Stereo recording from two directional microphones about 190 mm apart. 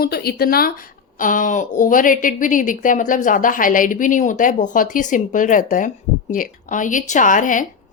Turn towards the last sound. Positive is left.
turn(degrees=45)  # may be behind; listen again after turning